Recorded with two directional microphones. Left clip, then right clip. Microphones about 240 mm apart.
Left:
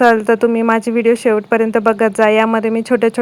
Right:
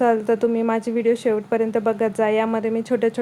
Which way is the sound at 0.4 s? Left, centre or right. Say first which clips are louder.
Left 7 dB; centre.